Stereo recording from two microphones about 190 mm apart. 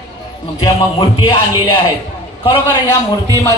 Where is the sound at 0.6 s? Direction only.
25° left (ahead or behind).